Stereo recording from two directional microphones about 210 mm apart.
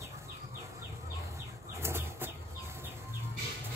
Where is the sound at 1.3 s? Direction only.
10° right (ahead or behind).